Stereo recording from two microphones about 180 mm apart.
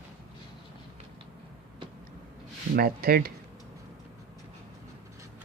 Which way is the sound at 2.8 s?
60° right (ahead or behind).